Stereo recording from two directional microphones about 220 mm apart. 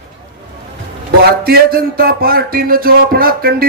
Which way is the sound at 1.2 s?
45° right (ahead or behind).